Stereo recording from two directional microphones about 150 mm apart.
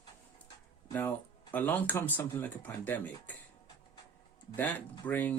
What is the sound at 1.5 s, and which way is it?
Speech, 10° left (ahead or behind).